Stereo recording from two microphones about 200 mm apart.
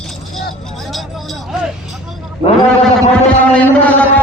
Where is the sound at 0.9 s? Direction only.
Centre (ahead or behind).